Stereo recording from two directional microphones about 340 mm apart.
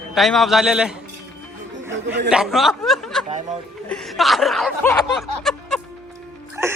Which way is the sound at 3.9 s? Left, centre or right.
Centre.